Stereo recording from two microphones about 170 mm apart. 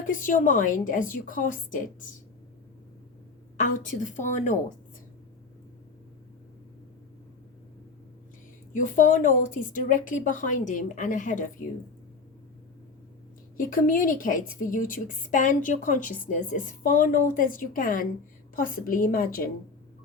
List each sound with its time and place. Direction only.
0.0 s a woman's voice: 50° left (ahead or behind)
3.6 s a woman's voice: 50° left (ahead or behind)
8.7 s a woman's voice: 50° left (ahead or behind)
13.6 s a woman's voice: 55° left (ahead or behind)